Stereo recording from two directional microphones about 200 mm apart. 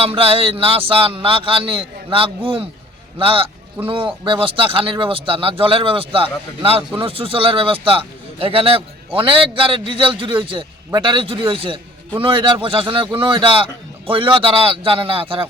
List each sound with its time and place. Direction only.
0.0 s speech: 30° right (ahead or behind)